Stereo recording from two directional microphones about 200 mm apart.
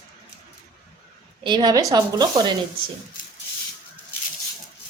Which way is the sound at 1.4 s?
20° right (ahead or behind).